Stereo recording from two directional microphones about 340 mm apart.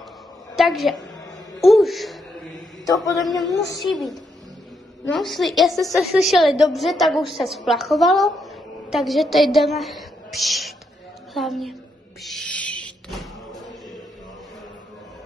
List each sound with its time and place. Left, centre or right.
0.6 s a woman's voice: centre
12.2 s music: centre